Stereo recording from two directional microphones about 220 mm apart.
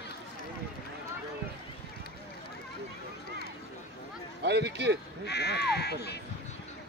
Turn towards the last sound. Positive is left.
turn(degrees=50)  # may be behind; listen again after turning